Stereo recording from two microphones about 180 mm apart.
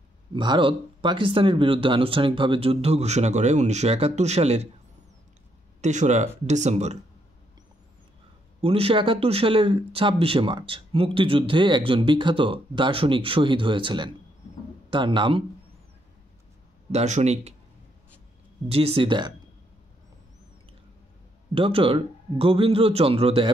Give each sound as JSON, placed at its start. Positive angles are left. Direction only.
{"t": 0.3, "sound": "speech", "side_deg": -25}
{"t": 5.8, "sound": "speech", "side_deg": -40}
{"t": 8.5, "sound": "speech", "side_deg": -30}
{"t": 16.9, "sound": "speech", "side_deg": -40}
{"t": 18.7, "sound": "speech", "side_deg": -30}
{"t": 21.5, "sound": "speech", "side_deg": -30}